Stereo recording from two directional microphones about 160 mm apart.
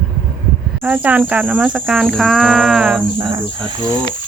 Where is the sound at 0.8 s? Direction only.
10° right (ahead or behind).